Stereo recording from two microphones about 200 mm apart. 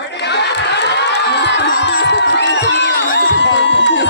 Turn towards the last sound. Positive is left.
turn(degrees=60)  # may be behind; listen again after turning